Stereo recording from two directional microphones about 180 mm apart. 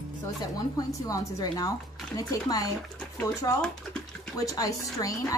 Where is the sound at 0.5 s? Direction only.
20° left (ahead or behind).